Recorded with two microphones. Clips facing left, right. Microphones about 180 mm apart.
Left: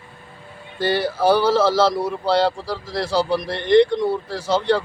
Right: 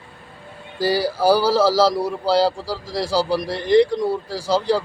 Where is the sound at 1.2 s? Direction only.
35° right (ahead or behind).